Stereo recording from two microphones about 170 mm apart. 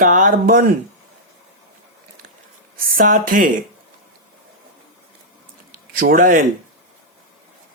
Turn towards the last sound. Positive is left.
turn(degrees=-55)  # may be behind; listen again after turning